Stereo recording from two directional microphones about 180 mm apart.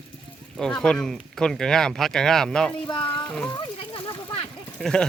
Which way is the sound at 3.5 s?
25° left (ahead or behind).